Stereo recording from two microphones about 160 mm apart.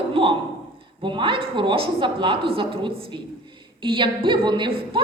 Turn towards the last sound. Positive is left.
turn(degrees=-30)  # may be behind; listen again after turning